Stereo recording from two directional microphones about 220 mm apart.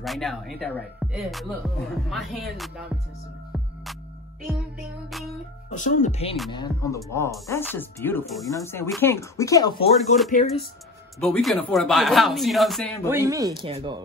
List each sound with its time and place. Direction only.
0.0 s speech: centre (ahead or behind)
5.7 s speech: 35° left (ahead or behind)
6.5 s speech: 15° left (ahead or behind)
10.1 s speech: 35° left (ahead or behind)
11.1 s speech: 5° left (ahead or behind)
13.1 s speech: 15° right (ahead or behind)
13.6 s speech: 25° right (ahead or behind)